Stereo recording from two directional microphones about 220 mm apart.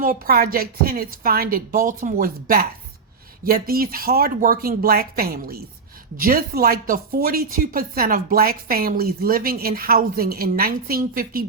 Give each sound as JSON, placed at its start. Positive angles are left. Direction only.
{"t": 0.0, "sound": "speech", "side_deg": -40}